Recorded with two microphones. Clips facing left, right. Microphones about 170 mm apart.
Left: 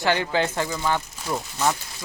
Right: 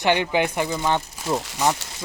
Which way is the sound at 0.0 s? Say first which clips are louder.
Right 2 dB; 20° right (ahead or behind).